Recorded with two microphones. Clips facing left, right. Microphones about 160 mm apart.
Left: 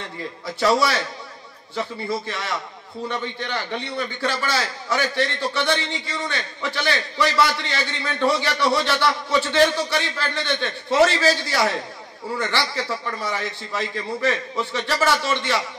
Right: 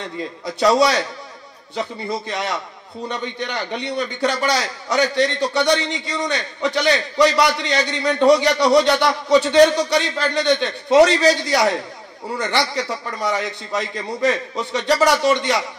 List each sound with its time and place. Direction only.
0.6 s a man's voice: 20° right (ahead or behind)